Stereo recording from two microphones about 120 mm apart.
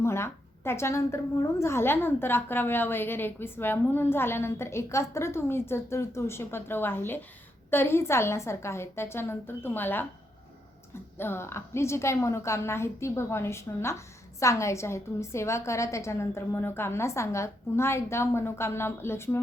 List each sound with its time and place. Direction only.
0.0 s a woman's voice: 20° left (ahead or behind)
11.2 s a woman's voice: 20° left (ahead or behind)